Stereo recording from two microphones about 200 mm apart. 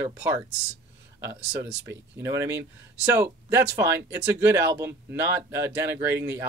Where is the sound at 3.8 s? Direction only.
10° right (ahead or behind).